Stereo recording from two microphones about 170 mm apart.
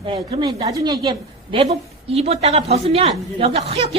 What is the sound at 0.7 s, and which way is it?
A woman's voice, 20° right (ahead or behind).